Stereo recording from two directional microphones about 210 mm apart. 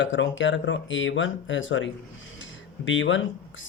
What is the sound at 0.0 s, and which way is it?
Speech, 60° left (ahead or behind).